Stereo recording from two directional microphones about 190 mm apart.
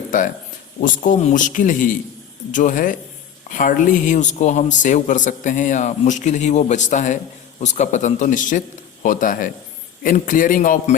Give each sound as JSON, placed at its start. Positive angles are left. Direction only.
{"t": 0.1, "sound": "a man's voice", "side_deg": 45}